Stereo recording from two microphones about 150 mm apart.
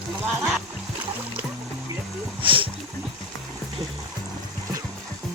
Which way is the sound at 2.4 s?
35° right (ahead or behind).